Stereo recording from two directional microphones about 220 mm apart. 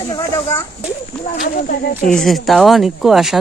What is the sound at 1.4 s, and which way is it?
Speech, 40° left (ahead or behind).